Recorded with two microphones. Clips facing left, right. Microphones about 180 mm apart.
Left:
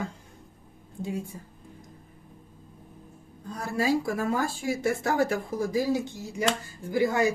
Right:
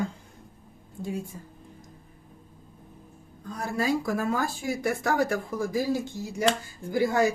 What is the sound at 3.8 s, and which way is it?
Speech, 25° left (ahead or behind).